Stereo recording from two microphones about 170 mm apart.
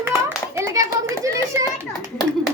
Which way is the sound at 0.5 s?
20° right (ahead or behind).